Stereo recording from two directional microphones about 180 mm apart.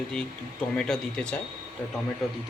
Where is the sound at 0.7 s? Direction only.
5° left (ahead or behind).